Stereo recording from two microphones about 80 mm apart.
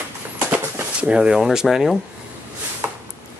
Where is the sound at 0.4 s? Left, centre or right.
Right.